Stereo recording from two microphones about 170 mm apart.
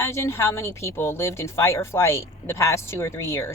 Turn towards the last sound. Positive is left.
turn(degrees=15)  # may be behind; listen again after turning